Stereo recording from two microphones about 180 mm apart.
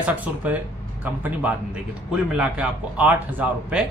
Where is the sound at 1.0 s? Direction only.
10° right (ahead or behind).